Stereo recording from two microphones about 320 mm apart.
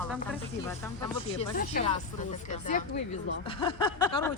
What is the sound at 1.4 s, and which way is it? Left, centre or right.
Speech, left.